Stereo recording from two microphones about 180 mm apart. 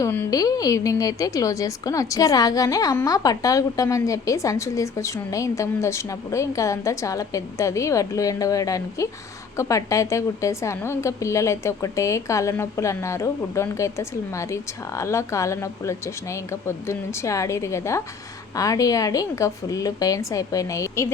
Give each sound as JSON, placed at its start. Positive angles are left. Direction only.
{"t": 0.0, "sound": "a woman's voice", "side_deg": 15}